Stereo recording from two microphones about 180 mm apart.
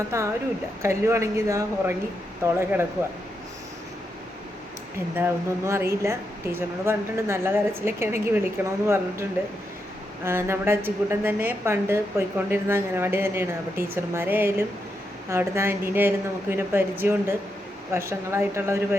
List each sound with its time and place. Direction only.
0.1 s a woman's voice: 15° right (ahead or behind)
5.1 s a woman's voice: 15° right (ahead or behind)